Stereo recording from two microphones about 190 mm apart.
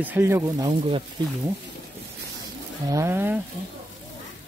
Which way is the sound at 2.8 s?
15° right (ahead or behind).